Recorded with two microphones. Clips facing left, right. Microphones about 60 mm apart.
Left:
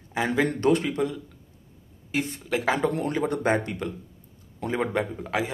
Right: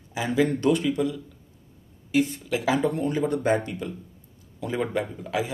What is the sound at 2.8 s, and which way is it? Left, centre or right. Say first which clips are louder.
Speech: right 1 dB; left.